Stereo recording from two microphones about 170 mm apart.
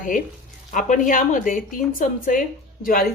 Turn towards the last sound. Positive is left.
turn(degrees=55)  # may be behind; listen again after turning